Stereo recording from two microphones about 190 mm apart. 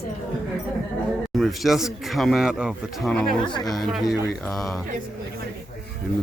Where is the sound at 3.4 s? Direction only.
25° left (ahead or behind).